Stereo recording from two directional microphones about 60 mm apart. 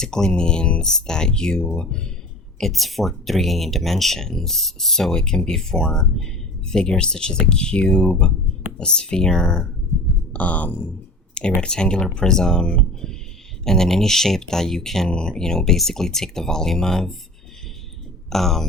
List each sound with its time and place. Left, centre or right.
0.0 s speech: centre
10.3 s speech: left
11.6 s speech: centre
18.3 s speech: centre